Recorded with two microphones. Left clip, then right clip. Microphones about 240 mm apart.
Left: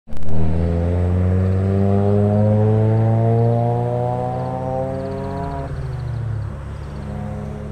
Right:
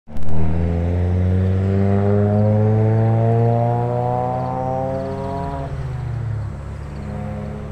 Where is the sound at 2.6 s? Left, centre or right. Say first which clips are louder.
Even; centre; by 5.6 s right.